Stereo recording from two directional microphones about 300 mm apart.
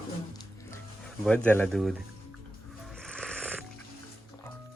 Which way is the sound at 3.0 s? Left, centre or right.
Centre.